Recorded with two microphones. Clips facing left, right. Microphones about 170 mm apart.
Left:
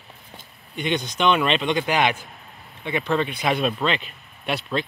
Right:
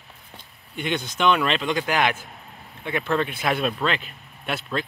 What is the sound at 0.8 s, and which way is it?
Speech, 55° right (ahead or behind).